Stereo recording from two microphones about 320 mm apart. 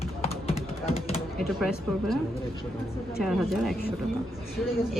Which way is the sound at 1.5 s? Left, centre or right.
Centre.